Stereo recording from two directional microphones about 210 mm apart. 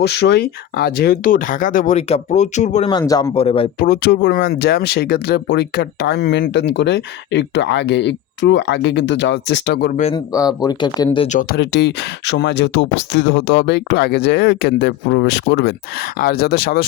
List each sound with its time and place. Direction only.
0.0 s speech: 50° left (ahead or behind); by 2.9 s 35° left (ahead or behind)
2.9 s a man's voice: 20° left (ahead or behind)
3.3 s speech: 25° left (ahead or behind)
3.8 s speech: 45° left (ahead or behind)
10.3 s speech: 15° left (ahead or behind)
11.3 s speech: 40° left (ahead or behind)
11.6 s speech: 55° left (ahead or behind)
16.1 s speech: 45° left (ahead or behind)